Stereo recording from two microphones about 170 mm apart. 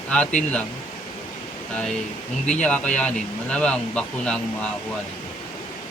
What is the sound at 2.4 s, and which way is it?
Speech, 5° left (ahead or behind).